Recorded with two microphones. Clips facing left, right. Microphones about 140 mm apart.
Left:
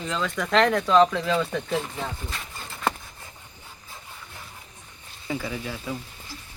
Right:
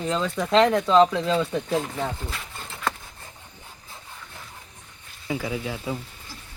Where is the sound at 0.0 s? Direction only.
30° right (ahead or behind).